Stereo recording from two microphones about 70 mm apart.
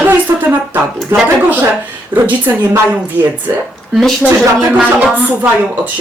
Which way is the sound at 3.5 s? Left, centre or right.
Right.